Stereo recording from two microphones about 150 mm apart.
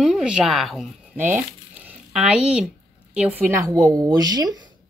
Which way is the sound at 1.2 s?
15° right (ahead or behind).